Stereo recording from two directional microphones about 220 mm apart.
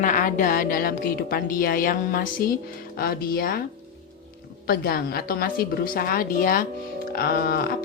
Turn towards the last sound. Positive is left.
turn(degrees=45)  # may be behind; listen again after turning